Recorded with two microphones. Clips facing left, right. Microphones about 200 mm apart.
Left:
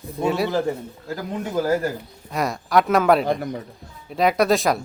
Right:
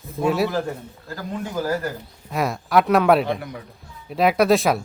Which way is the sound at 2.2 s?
Centre (ahead or behind).